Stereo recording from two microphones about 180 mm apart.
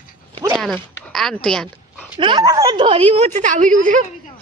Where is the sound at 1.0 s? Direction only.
5° left (ahead or behind).